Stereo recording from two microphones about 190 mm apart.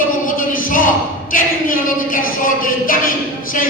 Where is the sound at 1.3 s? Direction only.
45° left (ahead or behind).